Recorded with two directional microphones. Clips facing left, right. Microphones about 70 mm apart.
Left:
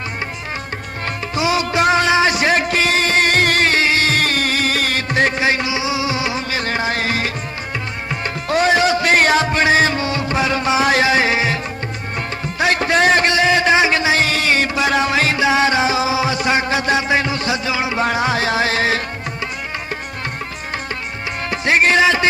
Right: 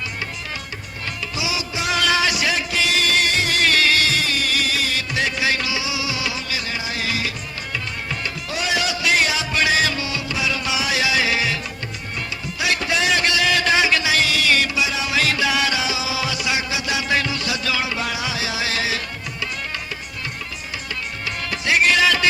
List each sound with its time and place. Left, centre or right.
1.0 s music: left
1.9 s music: left
6.6 s music: left
12.5 s a sound: left
14.8 s music: left
15.1 s music: left
17.1 s music: left
18.0 s music: left
21.5 s music: left